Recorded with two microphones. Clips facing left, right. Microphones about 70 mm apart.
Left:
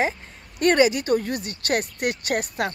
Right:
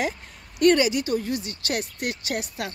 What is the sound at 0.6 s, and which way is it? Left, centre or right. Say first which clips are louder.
Speech: left 1 dB; left.